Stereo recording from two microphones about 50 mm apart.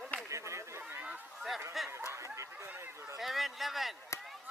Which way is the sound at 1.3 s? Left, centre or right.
Centre.